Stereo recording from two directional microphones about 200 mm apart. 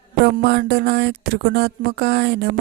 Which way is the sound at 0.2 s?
55° right (ahead or behind).